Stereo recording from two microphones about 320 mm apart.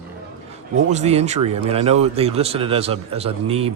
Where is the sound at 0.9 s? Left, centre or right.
Centre.